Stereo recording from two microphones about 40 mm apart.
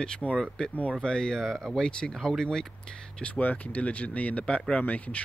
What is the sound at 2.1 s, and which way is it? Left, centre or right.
Speech, centre.